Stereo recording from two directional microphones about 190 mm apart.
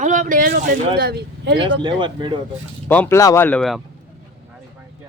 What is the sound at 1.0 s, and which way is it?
Speech, 55° right (ahead or behind).